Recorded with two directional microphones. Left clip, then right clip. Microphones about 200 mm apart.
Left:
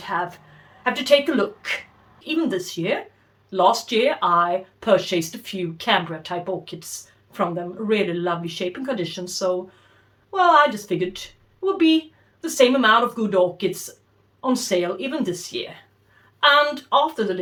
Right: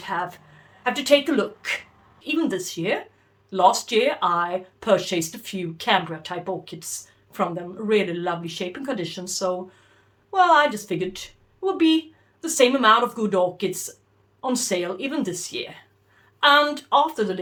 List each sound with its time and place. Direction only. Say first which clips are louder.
0.0 s a woman's voice: left 2 dB; 25° right (ahead or behind)